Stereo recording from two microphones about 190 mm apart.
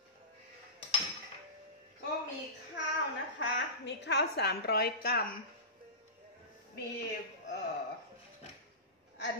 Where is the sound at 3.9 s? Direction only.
65° left (ahead or behind).